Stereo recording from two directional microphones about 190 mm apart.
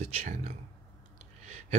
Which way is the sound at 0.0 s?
35° right (ahead or behind).